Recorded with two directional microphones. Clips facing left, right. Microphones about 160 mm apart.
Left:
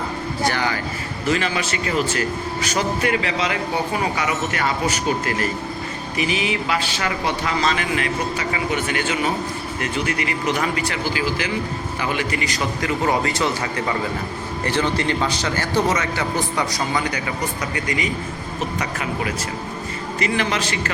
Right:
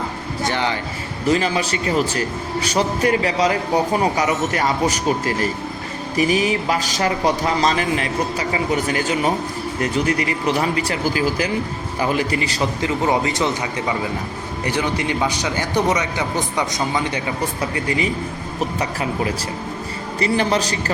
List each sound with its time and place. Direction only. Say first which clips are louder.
0.4 s a man's voice: right 1 dB; 25° right (ahead or behind)
6.1 s a man's voice: right 5 dB; 40° right (ahead or behind)